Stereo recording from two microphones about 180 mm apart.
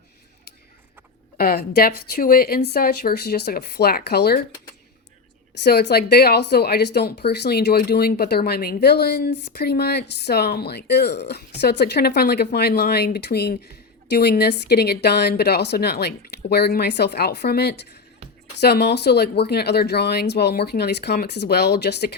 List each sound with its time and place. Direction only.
1.4 s speech: 55° left (ahead or behind)
5.6 s speech: 65° left (ahead or behind)